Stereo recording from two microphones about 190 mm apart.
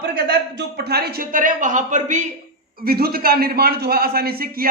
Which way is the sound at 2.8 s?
55° right (ahead or behind).